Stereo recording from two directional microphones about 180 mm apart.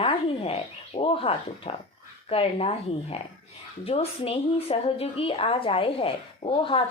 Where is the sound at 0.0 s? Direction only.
30° left (ahead or behind).